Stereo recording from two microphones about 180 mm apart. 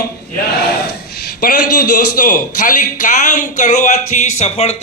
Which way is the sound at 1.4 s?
50° left (ahead or behind).